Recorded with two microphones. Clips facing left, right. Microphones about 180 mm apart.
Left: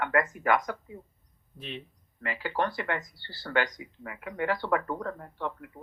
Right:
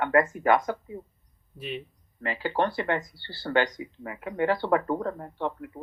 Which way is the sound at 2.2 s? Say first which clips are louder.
Right 3 dB; 30° right (ahead or behind).